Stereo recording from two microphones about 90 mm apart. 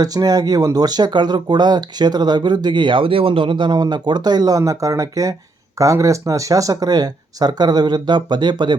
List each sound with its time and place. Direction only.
0.0 s speech: 45° right (ahead or behind)